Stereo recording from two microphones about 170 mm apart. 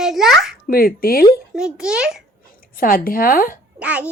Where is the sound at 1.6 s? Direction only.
5° right (ahead or behind).